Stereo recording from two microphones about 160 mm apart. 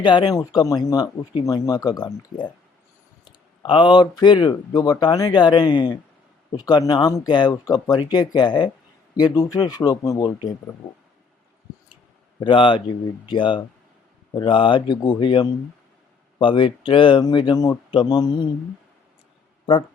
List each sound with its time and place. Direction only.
0.0 s speech: 30° left (ahead or behind)
12.4 s speech: 30° left (ahead or behind)